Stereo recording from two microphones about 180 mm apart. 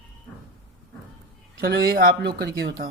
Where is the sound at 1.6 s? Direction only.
60° right (ahead or behind).